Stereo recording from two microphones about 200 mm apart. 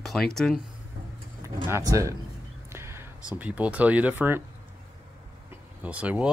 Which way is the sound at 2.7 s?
10° right (ahead or behind).